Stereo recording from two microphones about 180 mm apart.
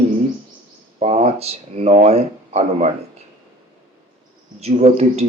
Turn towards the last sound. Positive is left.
turn(degrees=-35)  # may be behind; listen again after turning